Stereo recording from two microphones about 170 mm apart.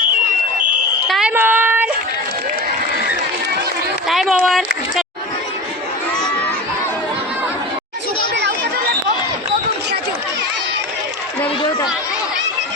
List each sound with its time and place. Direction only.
1.0 s fire alarm: centre (ahead or behind)
1.3 s a sound: 10° right (ahead or behind)
4.1 s speech: centre (ahead or behind)
11.4 s chatter: 25° left (ahead or behind)